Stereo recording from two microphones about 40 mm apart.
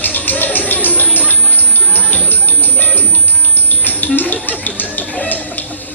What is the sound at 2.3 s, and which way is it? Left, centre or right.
Bird, left.